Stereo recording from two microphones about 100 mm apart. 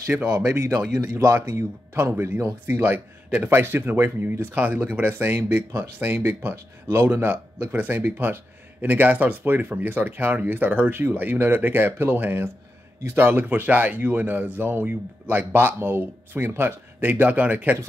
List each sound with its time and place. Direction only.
0.1 s speech: 10° right (ahead or behind)
1.0 s speech: 30° right (ahead or behind)